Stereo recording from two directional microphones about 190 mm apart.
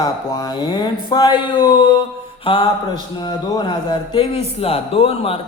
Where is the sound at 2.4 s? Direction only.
25° left (ahead or behind).